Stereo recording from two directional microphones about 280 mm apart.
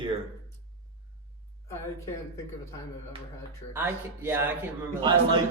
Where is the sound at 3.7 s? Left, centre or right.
Centre.